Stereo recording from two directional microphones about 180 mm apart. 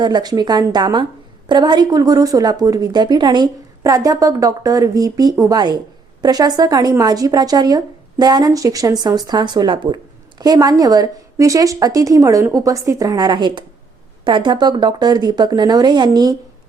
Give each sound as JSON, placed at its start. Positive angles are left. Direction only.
{"t": 0.0, "sound": "speech", "side_deg": -25}